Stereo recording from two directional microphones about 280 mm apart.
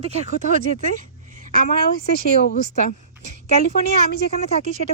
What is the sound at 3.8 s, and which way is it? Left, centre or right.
Speech, right.